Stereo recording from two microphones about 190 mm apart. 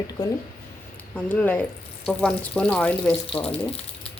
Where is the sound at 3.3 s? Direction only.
30° left (ahead or behind).